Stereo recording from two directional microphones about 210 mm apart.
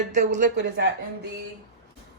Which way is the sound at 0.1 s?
35° right (ahead or behind).